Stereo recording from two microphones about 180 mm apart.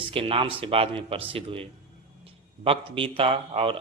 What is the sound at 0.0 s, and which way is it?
Speech, 30° right (ahead or behind).